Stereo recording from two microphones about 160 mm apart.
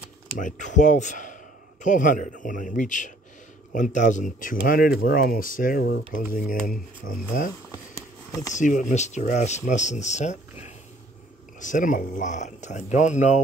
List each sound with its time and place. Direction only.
0.4 s speech: 50° left (ahead or behind)
8.5 s speech: 50° left (ahead or behind)